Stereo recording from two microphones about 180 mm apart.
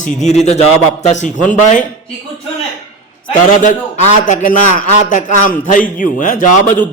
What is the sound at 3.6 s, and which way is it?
A man's voice, 45° left (ahead or behind).